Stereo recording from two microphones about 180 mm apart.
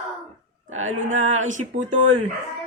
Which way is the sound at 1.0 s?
40° right (ahead or behind).